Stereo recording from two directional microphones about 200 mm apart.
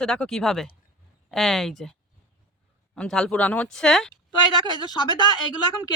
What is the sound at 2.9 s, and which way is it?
Speech, 5° left (ahead or behind).